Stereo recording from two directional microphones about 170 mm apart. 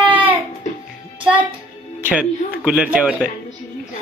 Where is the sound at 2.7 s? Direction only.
5° right (ahead or behind).